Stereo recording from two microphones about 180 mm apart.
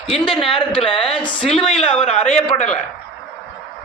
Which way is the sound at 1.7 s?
35° left (ahead or behind).